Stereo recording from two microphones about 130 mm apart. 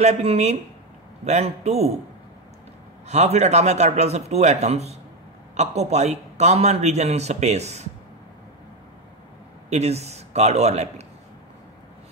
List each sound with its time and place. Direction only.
0.0 s a man's voice: 55° right (ahead or behind)
3.1 s a man's voice: 55° right (ahead or behind)
9.7 s a man's voice: 55° right (ahead or behind)